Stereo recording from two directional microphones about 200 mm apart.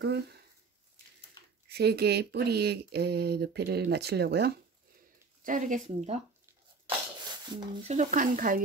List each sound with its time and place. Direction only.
0.0 s speech: 55° right (ahead or behind)
1.7 s speech: 55° right (ahead or behind)
5.4 s speech: 40° right (ahead or behind)
7.2 s a sound: 20° right (ahead or behind)
7.9 s speech: 40° right (ahead or behind)